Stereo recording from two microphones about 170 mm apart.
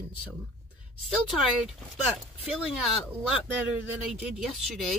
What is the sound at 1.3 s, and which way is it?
Speech, 5° right (ahead or behind).